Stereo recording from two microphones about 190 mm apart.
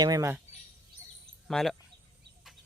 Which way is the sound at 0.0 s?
15° right (ahead or behind).